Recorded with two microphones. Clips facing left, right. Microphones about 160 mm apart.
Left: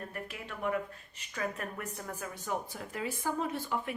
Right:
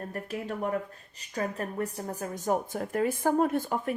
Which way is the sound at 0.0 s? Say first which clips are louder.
Right 7 dB; 40° right (ahead or behind).